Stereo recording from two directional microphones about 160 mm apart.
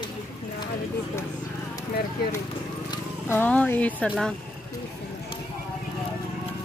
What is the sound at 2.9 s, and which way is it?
Speech, 15° left (ahead or behind).